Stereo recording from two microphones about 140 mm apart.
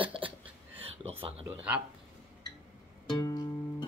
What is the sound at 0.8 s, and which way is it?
Speech, 45° right (ahead or behind).